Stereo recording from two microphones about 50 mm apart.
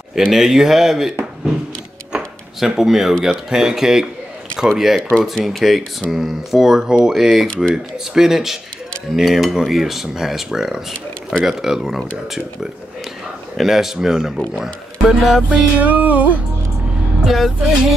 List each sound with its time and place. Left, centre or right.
0.3 s cutlery: centre
2.1 s a sound: centre
3.4 s cutlery: centre
5.2 s speech: centre
5.6 s cutlery: centre
7.1 s speech: centre
7.4 s speech: left
7.7 s cutlery: centre
13.6 s cutlery: centre
15.5 s music: right
17.2 s speech: centre